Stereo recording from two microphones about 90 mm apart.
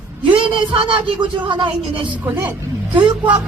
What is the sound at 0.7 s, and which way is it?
Speech, 80° right.